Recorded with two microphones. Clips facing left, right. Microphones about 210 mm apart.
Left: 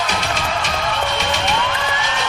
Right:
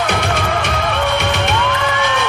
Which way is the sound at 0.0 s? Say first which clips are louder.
Right 5 dB; 55° right (ahead or behind).